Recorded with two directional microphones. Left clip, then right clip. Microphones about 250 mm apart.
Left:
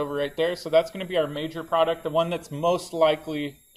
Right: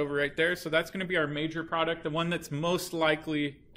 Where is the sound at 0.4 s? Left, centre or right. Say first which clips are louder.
Left 8 dB; centre.